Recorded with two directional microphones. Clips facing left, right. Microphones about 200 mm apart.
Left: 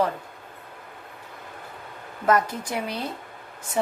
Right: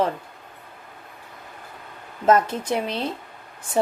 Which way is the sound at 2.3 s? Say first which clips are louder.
Right 4 dB; 25° right (ahead or behind).